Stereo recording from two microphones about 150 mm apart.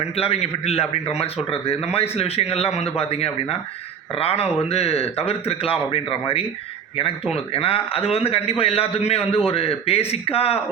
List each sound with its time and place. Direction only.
0.2 s a man's voice: 45° left (ahead or behind)